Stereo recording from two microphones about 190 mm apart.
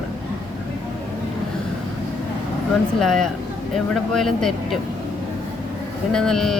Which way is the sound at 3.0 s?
Centre (ahead or behind).